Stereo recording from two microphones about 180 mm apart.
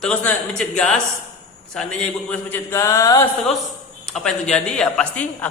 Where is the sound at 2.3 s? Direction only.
10° left (ahead or behind).